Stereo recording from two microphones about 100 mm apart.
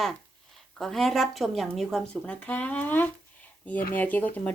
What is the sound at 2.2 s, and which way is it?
Dishes, 15° left (ahead or behind).